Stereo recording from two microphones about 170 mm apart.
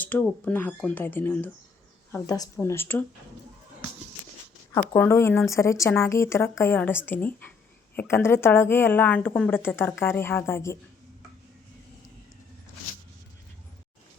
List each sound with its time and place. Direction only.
0.0 s a woman's voice: 10° left (ahead or behind)
2.1 s a woman's voice: 20° left (ahead or behind)
4.7 s a woman's voice: 10° left (ahead or behind)